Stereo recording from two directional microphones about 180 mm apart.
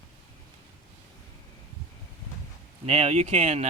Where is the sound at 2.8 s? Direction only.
35° right (ahead or behind).